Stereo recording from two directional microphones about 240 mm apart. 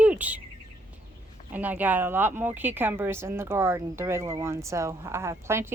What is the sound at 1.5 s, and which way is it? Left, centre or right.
Speech, centre.